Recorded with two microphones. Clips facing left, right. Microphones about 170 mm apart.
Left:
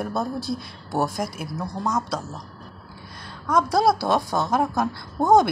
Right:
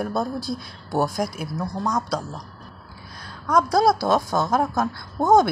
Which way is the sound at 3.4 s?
5° left (ahead or behind).